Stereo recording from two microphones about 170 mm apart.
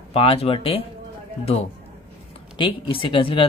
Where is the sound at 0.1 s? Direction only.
35° left (ahead or behind).